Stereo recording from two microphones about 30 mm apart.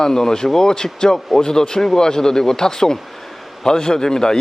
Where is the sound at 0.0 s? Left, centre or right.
Centre.